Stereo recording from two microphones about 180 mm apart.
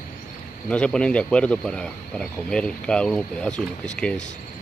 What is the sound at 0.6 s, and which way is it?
Speech, 5° left (ahead or behind).